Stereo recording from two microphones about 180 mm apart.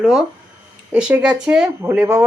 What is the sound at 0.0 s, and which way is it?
Speech, centre (ahead or behind).